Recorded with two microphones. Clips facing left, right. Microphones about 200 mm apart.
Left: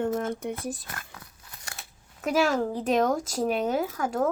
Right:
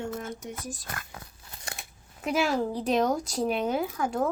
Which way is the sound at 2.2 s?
40° left (ahead or behind).